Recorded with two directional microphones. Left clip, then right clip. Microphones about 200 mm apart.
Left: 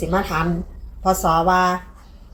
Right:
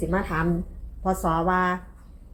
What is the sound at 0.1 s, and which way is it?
A woman's voice, 10° left (ahead or behind).